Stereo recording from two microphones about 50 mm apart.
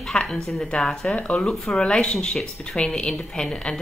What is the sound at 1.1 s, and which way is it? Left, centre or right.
Speech, left.